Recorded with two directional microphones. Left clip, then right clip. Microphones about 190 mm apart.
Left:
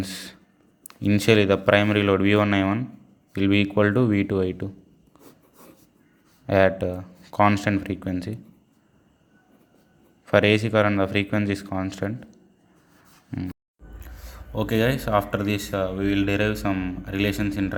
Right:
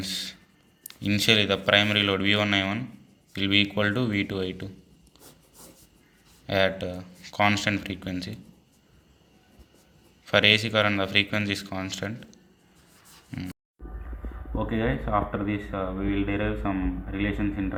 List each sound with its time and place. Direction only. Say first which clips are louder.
0.0 s a sound: right 2 dB; 50° left (ahead or behind)
0.9 s speech: left 2 dB; 45° left (ahead or behind)
6.4 s speech: left 5 dB; 45° left (ahead or behind)
10.2 s a man's voice: left 1 dB; 40° left (ahead or behind)
14.5 s speech: left 5 dB; 80° left